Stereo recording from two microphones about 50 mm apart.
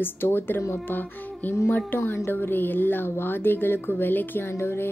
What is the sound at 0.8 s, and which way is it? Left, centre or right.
Music, left.